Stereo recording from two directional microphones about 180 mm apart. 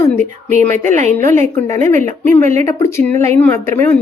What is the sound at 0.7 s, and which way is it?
A woman's voice, 45° right (ahead or behind).